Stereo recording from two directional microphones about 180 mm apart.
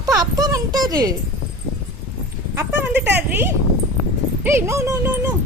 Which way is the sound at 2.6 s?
10° right (ahead or behind).